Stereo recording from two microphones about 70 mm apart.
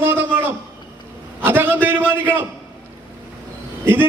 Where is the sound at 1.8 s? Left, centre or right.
Right.